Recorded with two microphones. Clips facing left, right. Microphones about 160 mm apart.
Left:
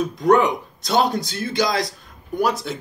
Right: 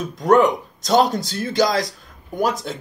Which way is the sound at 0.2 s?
45° right (ahead or behind).